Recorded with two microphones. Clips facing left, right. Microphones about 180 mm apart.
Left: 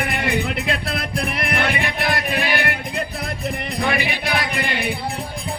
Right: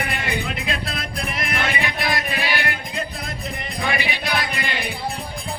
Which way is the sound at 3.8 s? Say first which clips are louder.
Left 2 dB; 55° left (ahead or behind).